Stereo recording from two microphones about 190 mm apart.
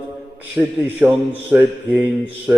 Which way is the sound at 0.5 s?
10° right (ahead or behind).